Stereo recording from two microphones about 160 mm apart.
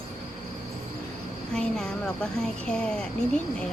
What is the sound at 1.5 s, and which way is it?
Speech, 5° left (ahead or behind).